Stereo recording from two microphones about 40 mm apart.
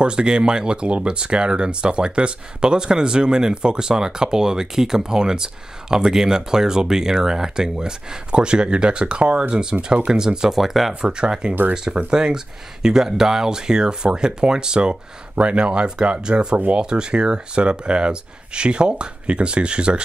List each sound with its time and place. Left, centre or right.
0.0 s speech: right; by 11.0 s centre
11.0 s speech: right